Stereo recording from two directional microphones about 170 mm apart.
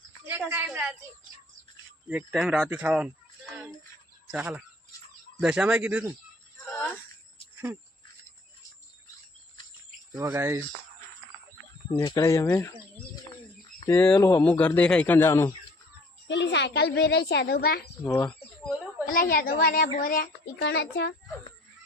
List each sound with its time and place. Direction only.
0.3 s speech: 15° right (ahead or behind)
2.0 s speech: 5° right (ahead or behind)
4.3 s speech: 5° right (ahead or behind)
6.7 s a sound: 15° left (ahead or behind)
10.2 s speech: 20° right (ahead or behind)
11.9 s speech: 25° left (ahead or behind)
13.8 s speech: 20° left (ahead or behind)
16.3 s a child's voice: 90° left; by 17.8 s 65° left (ahead or behind)
18.0 s speech: 15° left (ahead or behind)
19.0 s a child's voice: 55° left (ahead or behind); by 21.1 s 80° left